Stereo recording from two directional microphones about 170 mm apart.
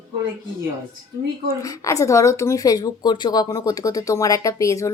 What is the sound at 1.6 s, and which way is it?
Speech, 20° left (ahead or behind).